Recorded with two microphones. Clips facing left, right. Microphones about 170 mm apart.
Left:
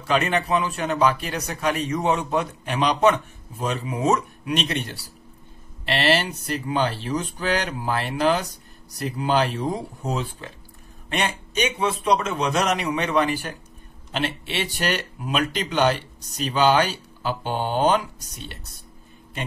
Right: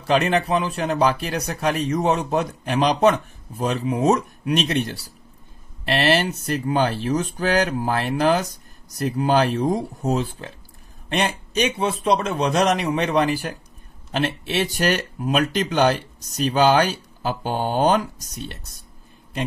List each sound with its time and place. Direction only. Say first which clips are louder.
0.0 s speech: right 3 dB; 35° right (ahead or behind)